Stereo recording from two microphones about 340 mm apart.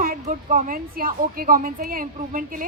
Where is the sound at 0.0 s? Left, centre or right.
Right.